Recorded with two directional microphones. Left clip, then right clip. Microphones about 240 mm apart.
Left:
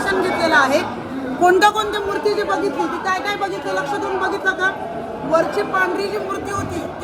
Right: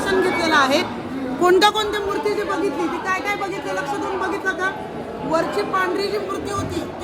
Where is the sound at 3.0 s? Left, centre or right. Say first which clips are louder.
Left 2 dB; right.